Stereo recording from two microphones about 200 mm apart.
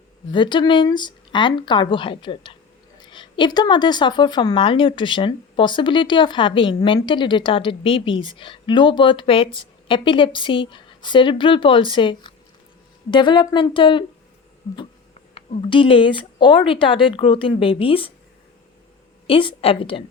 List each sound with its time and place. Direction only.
0.3 s speech: 20° left (ahead or behind)
15.4 s speech: 25° left (ahead or behind)
19.3 s speech: 25° left (ahead or behind)